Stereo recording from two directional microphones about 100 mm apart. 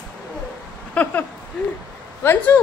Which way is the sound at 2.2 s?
25° left (ahead or behind).